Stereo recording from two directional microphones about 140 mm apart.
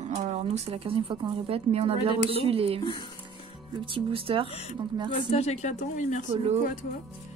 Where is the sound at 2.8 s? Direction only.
35° left (ahead or behind).